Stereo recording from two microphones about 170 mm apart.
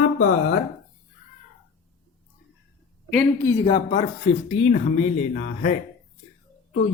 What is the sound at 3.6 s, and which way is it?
Speech, 30° left (ahead or behind).